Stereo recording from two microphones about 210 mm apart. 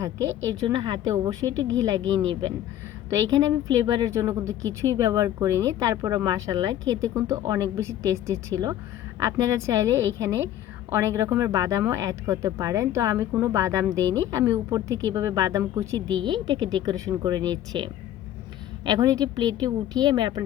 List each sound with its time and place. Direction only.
0.3 s a woman's voice: 65° right (ahead or behind)
0.6 s speech: 20° right (ahead or behind)